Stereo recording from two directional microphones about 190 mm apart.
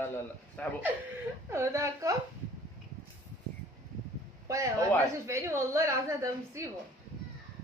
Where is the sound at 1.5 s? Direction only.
15° right (ahead or behind).